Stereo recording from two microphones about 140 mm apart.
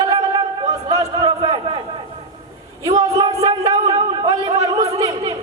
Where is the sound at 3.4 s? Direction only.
30° right (ahead or behind).